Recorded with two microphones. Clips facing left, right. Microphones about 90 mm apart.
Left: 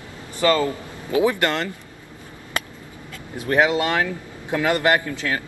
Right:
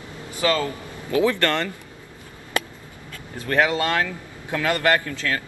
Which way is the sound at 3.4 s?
15° left (ahead or behind).